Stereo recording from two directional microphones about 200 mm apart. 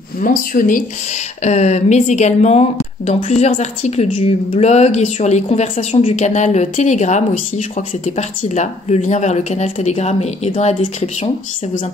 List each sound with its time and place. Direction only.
0.2 s speech: 45° left (ahead or behind)
1.4 s speech: 35° left (ahead or behind)